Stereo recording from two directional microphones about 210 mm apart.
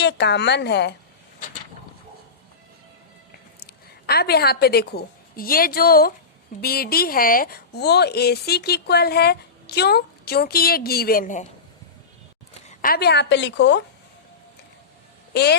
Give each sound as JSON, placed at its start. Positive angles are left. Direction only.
{"t": 0.0, "sound": "speech", "side_deg": 55}
{"t": 3.7, "sound": "a woman's voice", "side_deg": 45}
{"t": 12.6, "sound": "speech", "side_deg": 45}
{"t": 15.3, "sound": "speech", "side_deg": 50}